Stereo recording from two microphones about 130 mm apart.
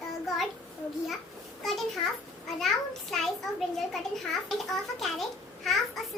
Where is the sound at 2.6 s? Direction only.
Centre (ahead or behind).